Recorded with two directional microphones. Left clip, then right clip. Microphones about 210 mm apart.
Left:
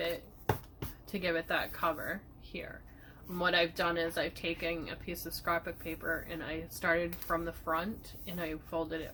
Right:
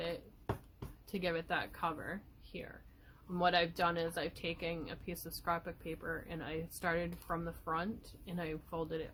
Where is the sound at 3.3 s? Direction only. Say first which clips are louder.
Left 2 dB; 50° right (ahead or behind).